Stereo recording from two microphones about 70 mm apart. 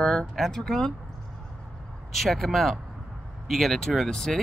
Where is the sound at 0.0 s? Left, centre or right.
Centre.